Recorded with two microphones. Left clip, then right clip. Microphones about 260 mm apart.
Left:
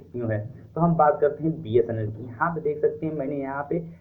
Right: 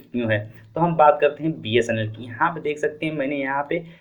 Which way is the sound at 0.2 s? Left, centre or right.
Right.